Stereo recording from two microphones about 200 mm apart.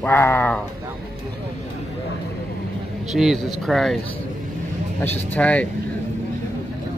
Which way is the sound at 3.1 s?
Centre (ahead or behind).